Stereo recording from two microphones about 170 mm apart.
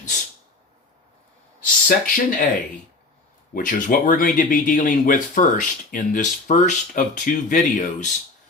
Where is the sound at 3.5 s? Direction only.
55° left (ahead or behind).